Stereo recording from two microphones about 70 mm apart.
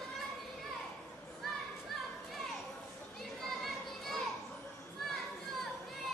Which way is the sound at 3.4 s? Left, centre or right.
Centre.